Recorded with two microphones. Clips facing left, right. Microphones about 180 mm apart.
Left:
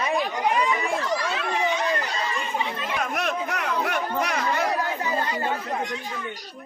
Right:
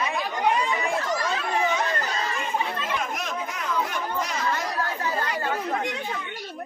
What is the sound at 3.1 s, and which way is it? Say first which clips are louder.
Chatter: left 4 dB; 65° left (ahead or behind).